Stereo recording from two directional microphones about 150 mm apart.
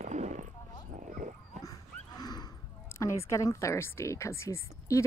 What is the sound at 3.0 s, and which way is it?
A woman's voice, 20° left (ahead or behind).